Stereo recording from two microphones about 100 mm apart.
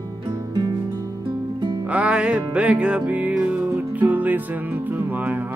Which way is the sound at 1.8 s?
10° right (ahead or behind).